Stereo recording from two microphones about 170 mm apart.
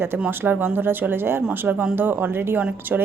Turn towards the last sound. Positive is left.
turn(degrees=-10)  # may be behind; listen again after turning